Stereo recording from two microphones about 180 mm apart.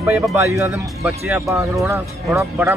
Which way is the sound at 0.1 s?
15° right (ahead or behind).